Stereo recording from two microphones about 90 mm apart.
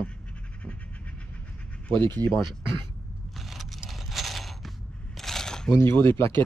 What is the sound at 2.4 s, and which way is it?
Speech, 60° right (ahead or behind).